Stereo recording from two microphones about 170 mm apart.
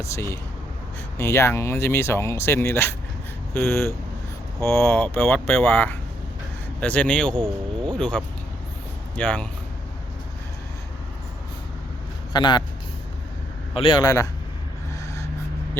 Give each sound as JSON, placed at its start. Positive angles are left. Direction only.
{"t": 0.0, "sound": "speech", "side_deg": 15}
{"t": 12.3, "sound": "speech", "side_deg": 25}
{"t": 13.7, "sound": "a man's voice", "side_deg": 30}